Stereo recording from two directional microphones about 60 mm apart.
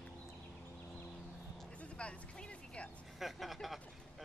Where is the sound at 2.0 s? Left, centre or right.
Centre.